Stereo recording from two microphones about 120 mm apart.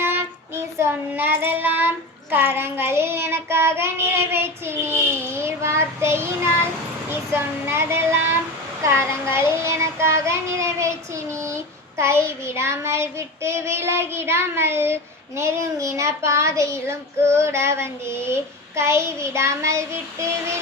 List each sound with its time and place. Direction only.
0.0 s child singing: 20° right (ahead or behind)